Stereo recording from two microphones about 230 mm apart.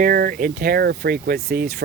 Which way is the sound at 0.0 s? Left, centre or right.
Right.